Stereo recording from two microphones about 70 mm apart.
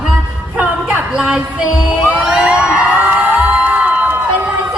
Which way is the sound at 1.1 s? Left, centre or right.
Centre.